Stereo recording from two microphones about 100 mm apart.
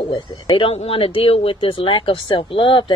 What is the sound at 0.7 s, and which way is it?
Speech, 75° left (ahead or behind).